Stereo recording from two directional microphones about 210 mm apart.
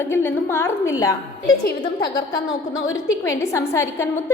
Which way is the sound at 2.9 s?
15° left (ahead or behind).